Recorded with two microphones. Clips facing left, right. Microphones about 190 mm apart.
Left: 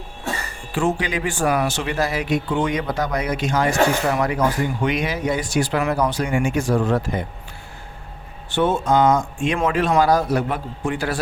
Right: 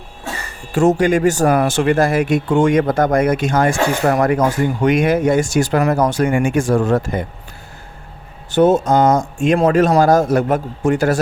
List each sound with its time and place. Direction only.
0.7 s speech: 45° right (ahead or behind)
8.4 s speech: 40° right (ahead or behind)